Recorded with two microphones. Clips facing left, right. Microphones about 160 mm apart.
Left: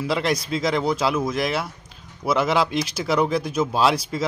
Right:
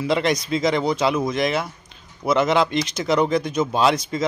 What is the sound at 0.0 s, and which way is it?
A man's voice, centre (ahead or behind).